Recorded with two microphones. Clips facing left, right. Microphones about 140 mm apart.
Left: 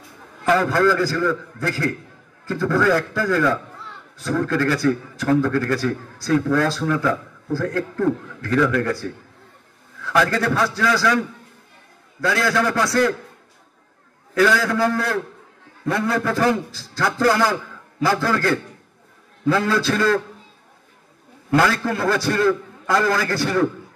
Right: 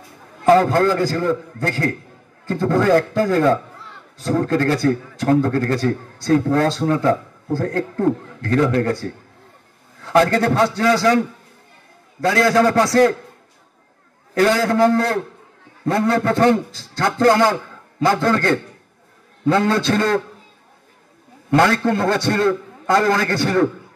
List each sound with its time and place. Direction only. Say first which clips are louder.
0.5 s a man's voice: right 4 dB; 25° right (ahead or behind)
10.0 s a man's voice: right 4 dB; 30° right (ahead or behind)
12.2 s a man's voice: right 5 dB; 30° right (ahead or behind)
14.4 s a man's voice: right 3 dB; 30° right (ahead or behind)
21.5 s a man's voice: right 3 dB; 25° right (ahead or behind)